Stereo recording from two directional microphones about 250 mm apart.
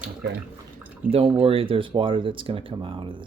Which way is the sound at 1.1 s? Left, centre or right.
Right.